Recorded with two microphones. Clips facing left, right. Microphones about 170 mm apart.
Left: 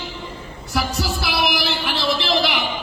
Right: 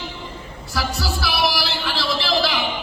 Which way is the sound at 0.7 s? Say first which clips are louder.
Left 2 dB; 20° left (ahead or behind).